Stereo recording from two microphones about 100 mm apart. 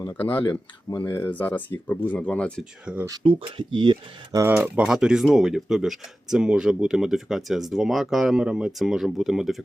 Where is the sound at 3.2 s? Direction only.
55° right (ahead or behind).